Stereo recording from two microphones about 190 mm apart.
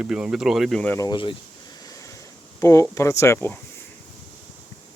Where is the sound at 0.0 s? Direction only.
5° right (ahead or behind).